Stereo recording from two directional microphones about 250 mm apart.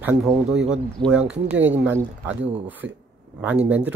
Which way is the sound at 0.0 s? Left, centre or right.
Centre.